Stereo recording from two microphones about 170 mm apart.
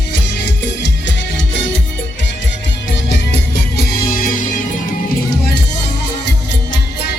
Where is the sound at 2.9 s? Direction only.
90° left; by 4.4 s 55° left (ahead or behind).